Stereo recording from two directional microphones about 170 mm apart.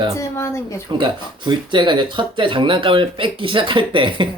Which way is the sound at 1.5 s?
25° right (ahead or behind).